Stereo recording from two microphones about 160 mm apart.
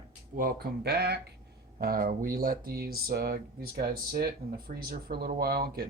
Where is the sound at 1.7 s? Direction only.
65° right (ahead or behind).